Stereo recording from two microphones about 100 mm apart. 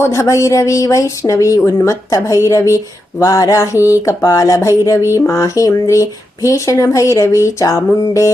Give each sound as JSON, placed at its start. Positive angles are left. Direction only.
{"t": 0.0, "sound": "speech", "side_deg": 30}